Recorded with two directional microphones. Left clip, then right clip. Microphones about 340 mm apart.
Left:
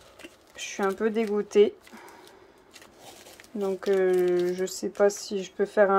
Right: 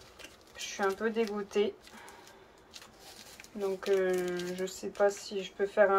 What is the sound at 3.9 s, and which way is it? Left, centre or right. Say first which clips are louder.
Speech: left 8 dB; left.